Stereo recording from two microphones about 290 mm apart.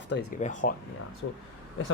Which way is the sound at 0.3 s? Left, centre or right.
Left.